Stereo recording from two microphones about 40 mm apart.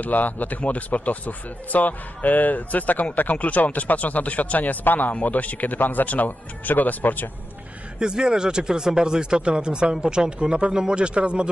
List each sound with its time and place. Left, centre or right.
0.0 s speech: left
8.0 s speech: right